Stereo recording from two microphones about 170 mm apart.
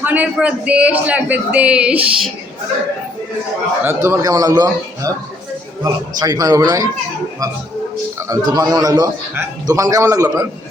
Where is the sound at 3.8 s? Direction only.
15° right (ahead or behind).